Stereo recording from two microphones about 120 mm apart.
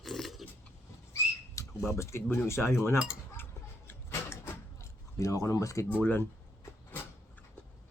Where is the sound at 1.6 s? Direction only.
25° left (ahead or behind).